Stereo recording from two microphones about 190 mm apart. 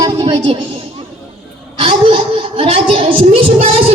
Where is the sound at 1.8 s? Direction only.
30° right (ahead or behind).